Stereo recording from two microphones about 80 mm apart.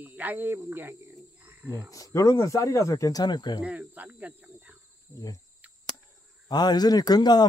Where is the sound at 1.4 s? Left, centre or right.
Right.